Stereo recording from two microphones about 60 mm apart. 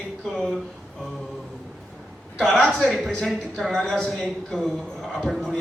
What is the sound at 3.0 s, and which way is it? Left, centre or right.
Speech, left.